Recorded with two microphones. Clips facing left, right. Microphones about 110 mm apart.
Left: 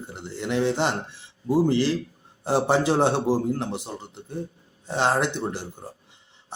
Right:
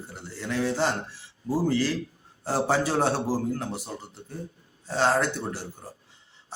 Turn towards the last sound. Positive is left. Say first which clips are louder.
# left 3 dB
turn(degrees=20)  # may be behind; listen again after turning